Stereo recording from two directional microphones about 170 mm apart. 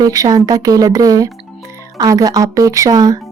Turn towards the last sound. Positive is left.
turn(degrees=-20)  # may be behind; listen again after turning